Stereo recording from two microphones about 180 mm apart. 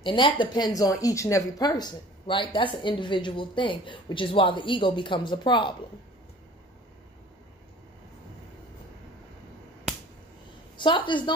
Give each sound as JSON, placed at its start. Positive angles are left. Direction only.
{"t": 0.0, "sound": "speech", "side_deg": 30}
{"t": 10.8, "sound": "speech", "side_deg": 25}